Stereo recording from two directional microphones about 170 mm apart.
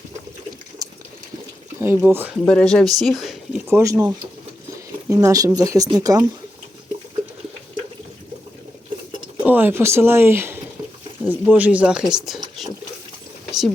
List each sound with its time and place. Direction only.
0.8 s water: 20° right (ahead or behind)
1.8 s speech: 15° right (ahead or behind)
2.4 s speech: 5° left (ahead or behind)
3.7 s speech: 15° right (ahead or behind)
9.4 s speech: 10° right (ahead or behind)
12.6 s water: centre (ahead or behind)
13.5 s a sound: centre (ahead or behind)